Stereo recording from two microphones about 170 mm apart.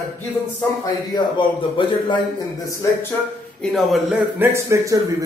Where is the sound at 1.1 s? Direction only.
25° left (ahead or behind).